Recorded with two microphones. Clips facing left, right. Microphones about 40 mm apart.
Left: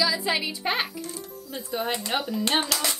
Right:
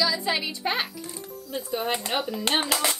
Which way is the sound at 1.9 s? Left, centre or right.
Centre.